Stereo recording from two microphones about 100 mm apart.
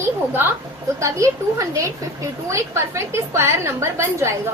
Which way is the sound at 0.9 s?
30° right (ahead or behind).